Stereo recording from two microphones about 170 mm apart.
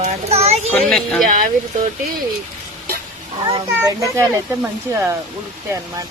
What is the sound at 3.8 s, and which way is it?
Speech, 15° right (ahead or behind).